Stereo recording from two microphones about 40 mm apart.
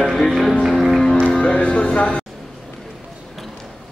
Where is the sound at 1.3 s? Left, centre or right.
Left.